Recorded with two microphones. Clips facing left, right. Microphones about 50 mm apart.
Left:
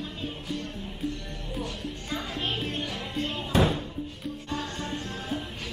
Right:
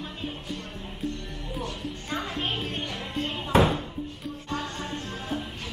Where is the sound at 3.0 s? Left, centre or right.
Centre.